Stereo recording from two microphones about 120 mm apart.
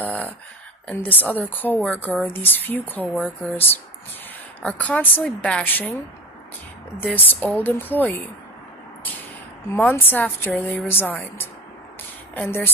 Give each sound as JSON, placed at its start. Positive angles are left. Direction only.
{"t": 0.0, "sound": "a sound", "side_deg": 10}
{"t": 0.9, "sound": "speech", "side_deg": 15}
{"t": 7.3, "sound": "speech", "side_deg": 15}
{"t": 9.7, "sound": "speech", "side_deg": 15}
{"t": 12.3, "sound": "speech", "side_deg": 15}